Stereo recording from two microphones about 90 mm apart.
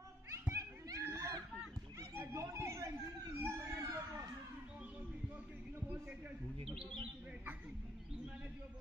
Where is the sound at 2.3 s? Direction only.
35° right (ahead or behind).